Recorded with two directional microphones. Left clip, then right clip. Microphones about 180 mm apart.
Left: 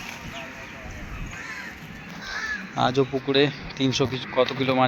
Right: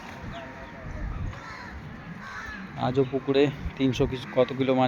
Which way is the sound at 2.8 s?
Centre (ahead or behind).